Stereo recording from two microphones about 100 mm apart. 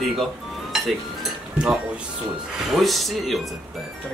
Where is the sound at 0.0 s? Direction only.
Centre (ahead or behind).